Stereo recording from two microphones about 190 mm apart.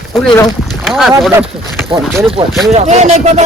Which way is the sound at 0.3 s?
20° left (ahead or behind).